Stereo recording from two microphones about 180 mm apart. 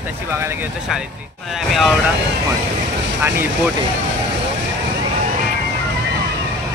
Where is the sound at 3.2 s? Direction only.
10° right (ahead or behind).